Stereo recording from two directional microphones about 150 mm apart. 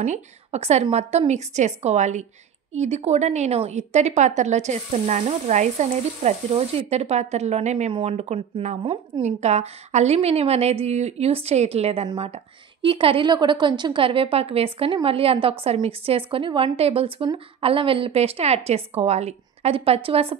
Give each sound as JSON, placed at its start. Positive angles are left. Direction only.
{"t": 0.0, "sound": "a woman's voice", "side_deg": -50}
{"t": 7.9, "sound": "a woman's voice", "side_deg": -40}